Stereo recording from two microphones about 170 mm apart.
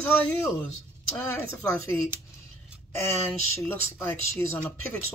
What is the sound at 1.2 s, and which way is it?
Speech, 15° left (ahead or behind).